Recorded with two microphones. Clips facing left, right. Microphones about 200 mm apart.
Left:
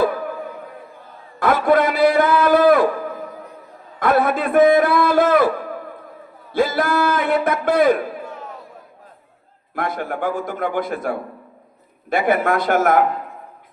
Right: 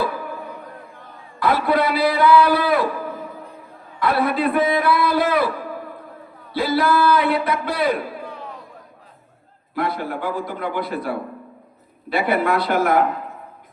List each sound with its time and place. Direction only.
1.4 s a sound: 50° left (ahead or behind)
4.0 s a man's voice: 50° left (ahead or behind)
9.7 s a man's voice: 50° left (ahead or behind)